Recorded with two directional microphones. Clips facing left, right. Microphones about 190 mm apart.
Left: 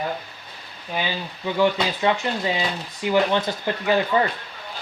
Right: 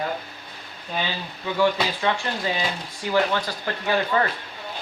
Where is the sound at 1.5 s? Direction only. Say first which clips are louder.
Left 1 dB; 20° left (ahead or behind).